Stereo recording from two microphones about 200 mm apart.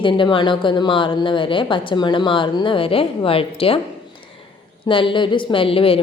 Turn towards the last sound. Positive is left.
turn(degrees=30)  # may be behind; listen again after turning